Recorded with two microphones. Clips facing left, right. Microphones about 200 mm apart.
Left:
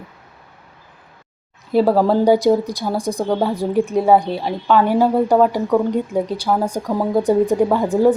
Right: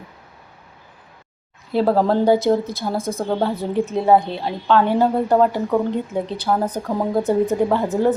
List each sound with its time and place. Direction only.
1.7 s a woman's voice: 10° left (ahead or behind)